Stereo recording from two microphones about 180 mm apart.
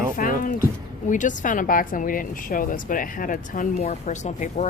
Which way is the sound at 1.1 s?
45° left (ahead or behind).